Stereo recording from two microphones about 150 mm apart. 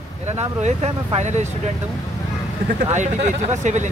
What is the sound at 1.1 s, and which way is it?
Speech, 50° right (ahead or behind).